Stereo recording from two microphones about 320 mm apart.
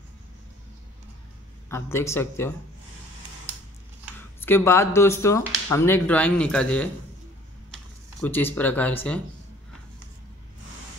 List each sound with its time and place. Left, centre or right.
1.7 s speech: centre
4.4 s speech: centre
8.2 s speech: centre